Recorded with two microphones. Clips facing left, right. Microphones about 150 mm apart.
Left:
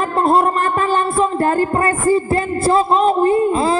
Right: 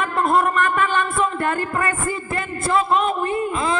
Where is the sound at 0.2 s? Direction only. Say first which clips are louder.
Left 4 dB; 30° left (ahead or behind).